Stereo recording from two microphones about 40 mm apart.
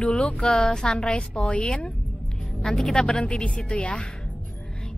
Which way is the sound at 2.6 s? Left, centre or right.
Centre.